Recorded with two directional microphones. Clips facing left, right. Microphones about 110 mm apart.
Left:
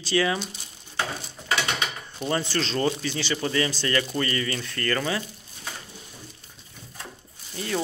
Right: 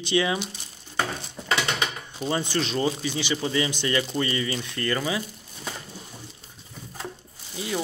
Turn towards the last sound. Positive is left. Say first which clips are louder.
# left 1 dB
turn(degrees=-10)  # may be behind; listen again after turning